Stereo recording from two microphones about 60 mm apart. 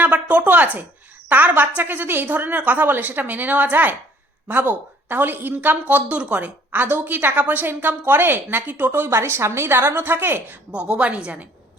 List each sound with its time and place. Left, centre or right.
0.0 s a woman's voice: right
9.0 s a woman's voice: right
10.7 s a woman's voice: centre